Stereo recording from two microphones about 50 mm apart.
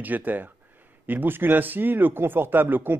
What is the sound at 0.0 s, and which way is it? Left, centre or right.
Speech, right.